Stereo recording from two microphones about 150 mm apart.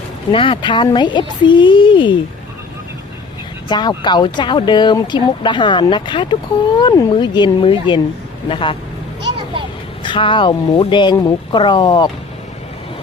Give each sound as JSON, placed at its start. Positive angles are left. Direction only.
{"t": 0.3, "sound": "speech", "side_deg": 35}
{"t": 3.7, "sound": "speech", "side_deg": 30}
{"t": 10.0, "sound": "speech", "side_deg": 35}